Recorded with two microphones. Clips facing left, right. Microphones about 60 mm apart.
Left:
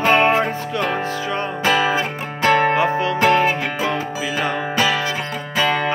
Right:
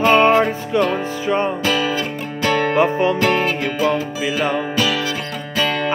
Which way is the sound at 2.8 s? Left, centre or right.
Right.